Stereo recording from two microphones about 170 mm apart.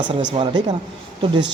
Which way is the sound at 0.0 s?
25° right (ahead or behind).